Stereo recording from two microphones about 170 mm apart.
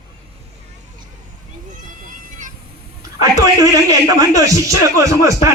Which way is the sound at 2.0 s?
50° right (ahead or behind).